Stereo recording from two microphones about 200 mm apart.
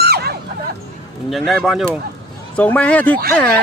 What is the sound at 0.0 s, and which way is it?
Dog, 50° right (ahead or behind).